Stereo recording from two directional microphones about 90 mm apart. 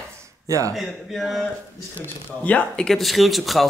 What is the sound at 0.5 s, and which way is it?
Speech, 35° right (ahead or behind).